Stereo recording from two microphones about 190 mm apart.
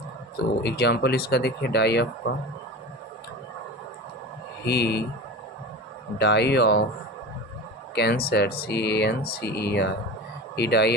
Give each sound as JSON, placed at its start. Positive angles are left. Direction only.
{"t": 0.6, "sound": "speech", "side_deg": 60}
{"t": 4.6, "sound": "speech", "side_deg": 60}
{"t": 6.1, "sound": "speech", "side_deg": 60}
{"t": 7.9, "sound": "speech", "side_deg": 55}